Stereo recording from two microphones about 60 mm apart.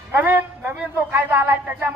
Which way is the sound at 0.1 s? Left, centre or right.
Right.